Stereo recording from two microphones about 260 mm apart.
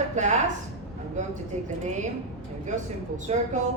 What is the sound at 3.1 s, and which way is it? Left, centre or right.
Speech, right.